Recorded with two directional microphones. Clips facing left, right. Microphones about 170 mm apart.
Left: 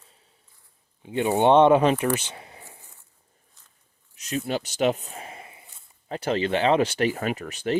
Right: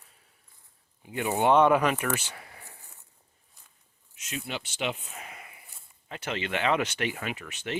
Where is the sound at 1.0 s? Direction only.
25° left (ahead or behind).